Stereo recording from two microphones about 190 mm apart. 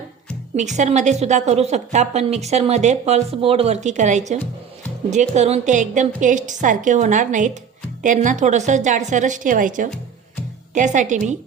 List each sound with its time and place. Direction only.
0.5 s a woman's voice: 40° right (ahead or behind)
5.3 s a woman's voice: 35° right (ahead or behind)